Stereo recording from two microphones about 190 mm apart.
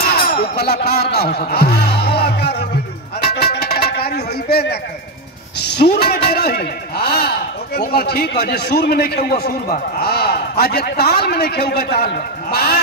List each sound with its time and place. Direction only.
0.0 s music: 55° left (ahead or behind)
5.6 s a sound: 60° left (ahead or behind)
7.9 s a man's voice: 60° left (ahead or behind)